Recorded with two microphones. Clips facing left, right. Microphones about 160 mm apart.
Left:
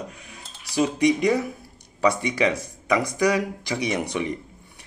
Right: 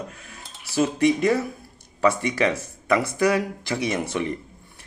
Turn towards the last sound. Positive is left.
turn(degrees=15)  # may be behind; listen again after turning